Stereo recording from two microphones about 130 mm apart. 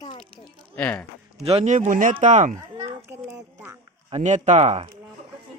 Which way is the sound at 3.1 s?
15° right (ahead or behind).